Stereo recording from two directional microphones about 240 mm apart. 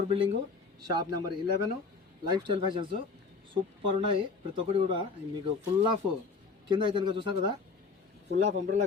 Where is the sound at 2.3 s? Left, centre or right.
Centre.